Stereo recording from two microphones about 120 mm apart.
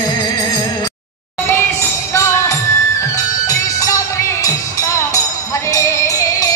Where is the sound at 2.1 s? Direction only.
25° left (ahead or behind).